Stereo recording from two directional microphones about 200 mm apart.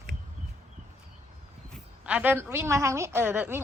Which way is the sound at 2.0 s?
5° right (ahead or behind).